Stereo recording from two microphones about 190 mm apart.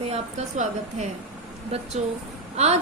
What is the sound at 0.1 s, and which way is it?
A woman's voice, 35° right (ahead or behind).